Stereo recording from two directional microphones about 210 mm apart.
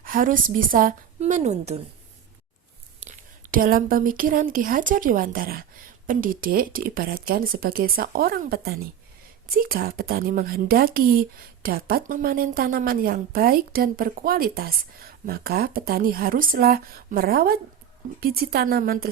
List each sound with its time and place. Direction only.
0.0 s a woman's voice: 40° right (ahead or behind)
3.0 s a woman's voice: 40° right (ahead or behind)